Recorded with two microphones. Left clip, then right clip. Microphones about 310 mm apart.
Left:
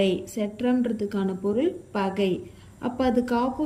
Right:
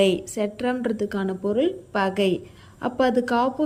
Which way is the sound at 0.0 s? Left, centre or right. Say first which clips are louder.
Right 4 dB; centre.